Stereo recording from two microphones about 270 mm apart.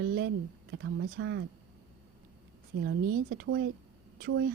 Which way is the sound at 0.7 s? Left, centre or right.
Right.